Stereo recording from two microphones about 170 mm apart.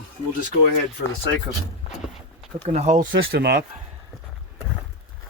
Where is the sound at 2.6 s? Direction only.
40° right (ahead or behind).